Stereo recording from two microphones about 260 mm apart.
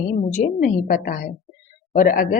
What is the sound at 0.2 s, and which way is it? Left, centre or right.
Speech, left.